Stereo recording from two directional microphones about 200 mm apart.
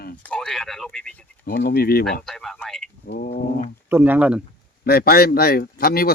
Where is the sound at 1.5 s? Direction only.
50° left (ahead or behind).